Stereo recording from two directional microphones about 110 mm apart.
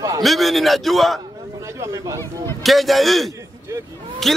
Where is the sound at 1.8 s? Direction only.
30° right (ahead or behind).